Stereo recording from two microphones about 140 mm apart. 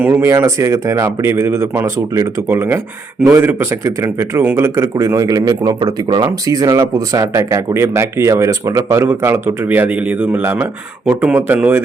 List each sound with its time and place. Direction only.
0.0 s speech: 15° right (ahead or behind)